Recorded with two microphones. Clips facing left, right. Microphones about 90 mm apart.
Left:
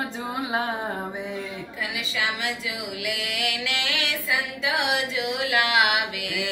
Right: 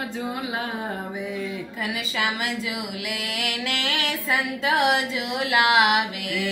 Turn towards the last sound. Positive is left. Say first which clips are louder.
# right 2 dB
turn(degrees=-40)  # may be behind; listen again after turning